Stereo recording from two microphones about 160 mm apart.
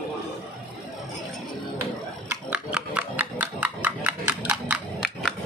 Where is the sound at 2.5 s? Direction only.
5° right (ahead or behind).